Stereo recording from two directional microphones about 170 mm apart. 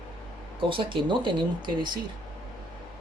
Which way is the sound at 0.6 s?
30° right (ahead or behind).